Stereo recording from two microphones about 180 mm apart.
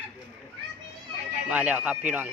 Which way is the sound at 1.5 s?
10° right (ahead or behind).